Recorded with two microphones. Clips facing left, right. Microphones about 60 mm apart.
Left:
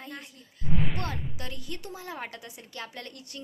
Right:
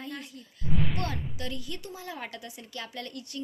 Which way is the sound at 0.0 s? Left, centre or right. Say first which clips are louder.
Right 3 dB; left.